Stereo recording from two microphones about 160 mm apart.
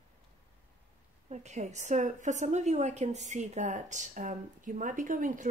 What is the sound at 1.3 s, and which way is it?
A woman's voice, 45° right (ahead or behind).